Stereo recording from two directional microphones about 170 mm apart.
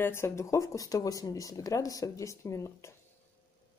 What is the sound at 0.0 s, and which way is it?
Speech, 15° left (ahead or behind).